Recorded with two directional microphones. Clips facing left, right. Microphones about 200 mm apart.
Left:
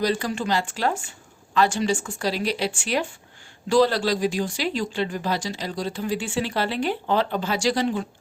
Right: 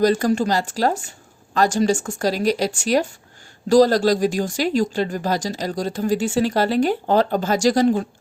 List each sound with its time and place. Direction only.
0.0 s a woman's voice: 45° right (ahead or behind)